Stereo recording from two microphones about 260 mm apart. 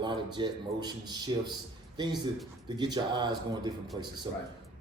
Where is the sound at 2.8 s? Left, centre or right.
Centre.